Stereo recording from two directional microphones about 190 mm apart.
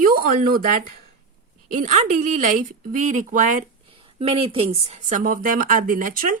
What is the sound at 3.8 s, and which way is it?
Speech, 30° right (ahead or behind).